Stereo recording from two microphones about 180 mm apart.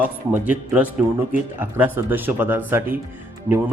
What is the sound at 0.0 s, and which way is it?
A man's voice, 10° right (ahead or behind).